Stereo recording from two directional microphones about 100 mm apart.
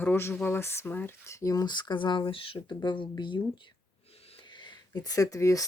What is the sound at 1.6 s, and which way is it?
Speech, 50° left (ahead or behind).